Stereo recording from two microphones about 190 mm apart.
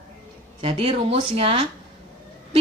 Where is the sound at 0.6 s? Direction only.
30° right (ahead or behind).